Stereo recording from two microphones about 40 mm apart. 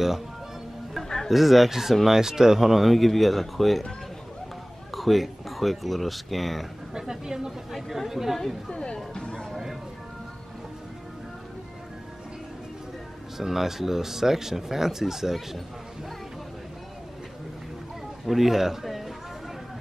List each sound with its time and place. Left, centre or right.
0.9 s music: centre
1.3 s speech: centre
4.9 s speech: centre
6.9 s speech: centre
8.6 s speech: left
13.4 s speech: centre
18.2 s a man's voice: centre